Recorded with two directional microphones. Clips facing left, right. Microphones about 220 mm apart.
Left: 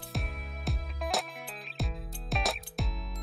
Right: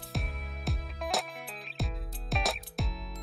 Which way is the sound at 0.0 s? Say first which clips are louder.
Even; centre (ahead or behind).